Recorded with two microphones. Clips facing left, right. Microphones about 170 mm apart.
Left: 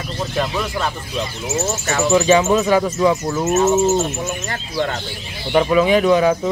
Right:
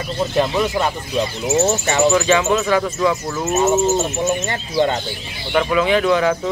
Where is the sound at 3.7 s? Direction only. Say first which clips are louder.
Left 1 dB; centre (ahead or behind).